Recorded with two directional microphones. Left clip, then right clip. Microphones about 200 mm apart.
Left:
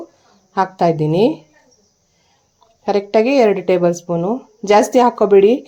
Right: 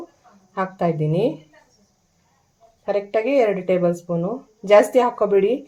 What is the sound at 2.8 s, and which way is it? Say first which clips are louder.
Speech: left 6 dB; 45° left (ahead or behind).